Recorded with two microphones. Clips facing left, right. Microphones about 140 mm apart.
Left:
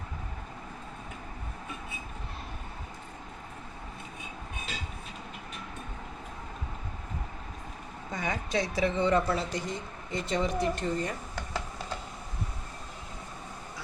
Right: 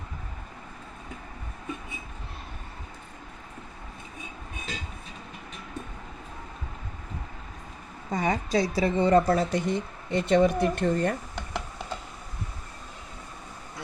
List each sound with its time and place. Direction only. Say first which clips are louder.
8.1 s a woman's voice: right 6 dB; 35° right (ahead or behind)
9.7 s speech: right 7 dB; 65° right (ahead or behind)